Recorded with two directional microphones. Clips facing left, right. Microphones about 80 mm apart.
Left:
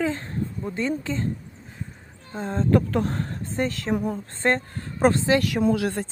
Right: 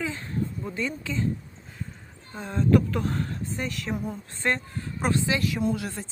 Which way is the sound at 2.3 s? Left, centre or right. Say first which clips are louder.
Left 1 dB; left.